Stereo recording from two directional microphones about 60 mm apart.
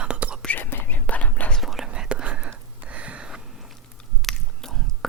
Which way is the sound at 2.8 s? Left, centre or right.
Right.